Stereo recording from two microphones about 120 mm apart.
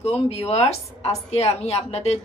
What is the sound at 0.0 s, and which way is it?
A woman's voice, 55° left (ahead or behind).